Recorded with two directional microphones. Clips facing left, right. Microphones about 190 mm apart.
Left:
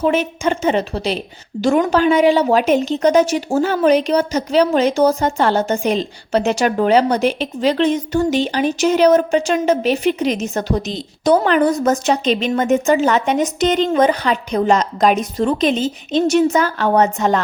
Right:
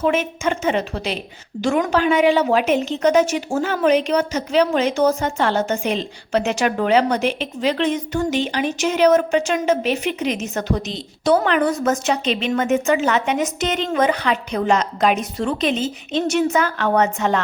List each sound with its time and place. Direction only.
0.0 s a woman's voice: 35° left (ahead or behind)